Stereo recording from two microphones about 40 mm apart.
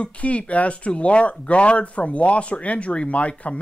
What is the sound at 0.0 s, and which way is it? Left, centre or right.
Speech, left.